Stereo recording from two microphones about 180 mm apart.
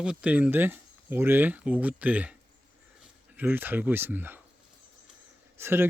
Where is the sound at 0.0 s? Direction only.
5° right (ahead or behind).